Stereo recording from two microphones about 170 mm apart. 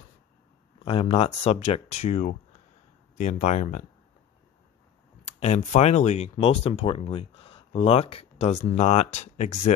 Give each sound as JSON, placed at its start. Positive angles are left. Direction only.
{"t": 0.8, "sound": "speech", "side_deg": 35}
{"t": 5.2, "sound": "speech", "side_deg": 45}